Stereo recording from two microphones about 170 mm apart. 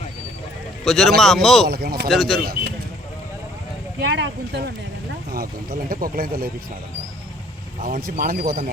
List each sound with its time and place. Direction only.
0.9 s a man's voice: centre (ahead or behind)
1.6 s speech: 65° right (ahead or behind)
2.0 s a man's voice: centre (ahead or behind)
2.4 s speech: 60° right (ahead or behind)
4.0 s speech: 75° right (ahead or behind)
5.9 s speech: 55° right (ahead or behind)
7.9 s speech: 60° right (ahead or behind)